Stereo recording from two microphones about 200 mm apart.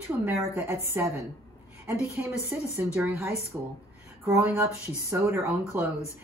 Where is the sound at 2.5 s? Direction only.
10° right (ahead or behind).